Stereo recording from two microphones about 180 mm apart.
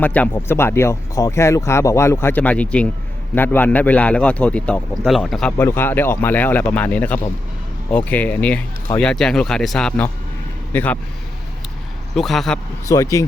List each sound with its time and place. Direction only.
0.0 s speech: 10° left (ahead or behind)
12.1 s speech: centre (ahead or behind)
12.9 s speech: 20° left (ahead or behind)